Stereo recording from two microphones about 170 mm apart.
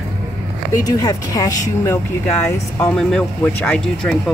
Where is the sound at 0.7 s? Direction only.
20° left (ahead or behind).